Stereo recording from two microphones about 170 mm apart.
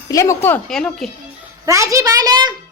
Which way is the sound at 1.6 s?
20° right (ahead or behind).